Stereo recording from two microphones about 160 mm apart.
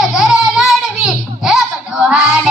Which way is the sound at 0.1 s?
Centre (ahead or behind).